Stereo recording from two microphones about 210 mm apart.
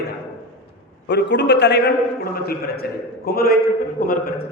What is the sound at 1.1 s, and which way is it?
Speech, 55° left (ahead or behind).